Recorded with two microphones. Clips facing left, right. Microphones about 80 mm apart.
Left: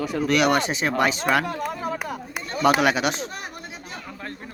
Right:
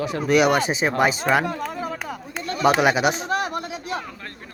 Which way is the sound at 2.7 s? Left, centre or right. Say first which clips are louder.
Right 2 dB; centre.